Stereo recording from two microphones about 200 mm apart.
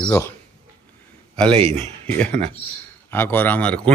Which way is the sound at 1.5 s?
25° right (ahead or behind).